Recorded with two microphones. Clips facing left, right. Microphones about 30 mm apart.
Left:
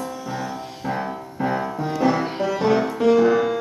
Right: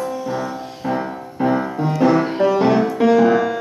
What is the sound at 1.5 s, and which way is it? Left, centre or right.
Music, centre.